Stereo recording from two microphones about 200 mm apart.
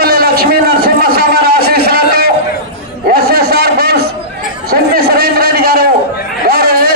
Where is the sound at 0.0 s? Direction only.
50° right (ahead or behind).